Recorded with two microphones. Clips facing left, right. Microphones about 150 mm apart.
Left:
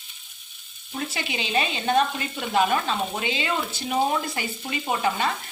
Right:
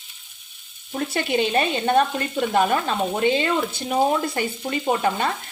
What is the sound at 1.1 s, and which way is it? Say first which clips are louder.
Speech: right 7 dB; 50° right (ahead or behind).